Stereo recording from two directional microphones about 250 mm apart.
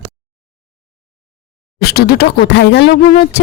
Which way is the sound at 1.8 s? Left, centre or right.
Left.